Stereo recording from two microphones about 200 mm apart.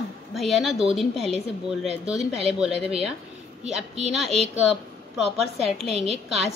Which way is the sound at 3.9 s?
30° right (ahead or behind).